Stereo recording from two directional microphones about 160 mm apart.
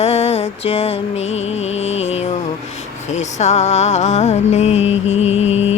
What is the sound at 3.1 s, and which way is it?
Music, 45° left (ahead or behind).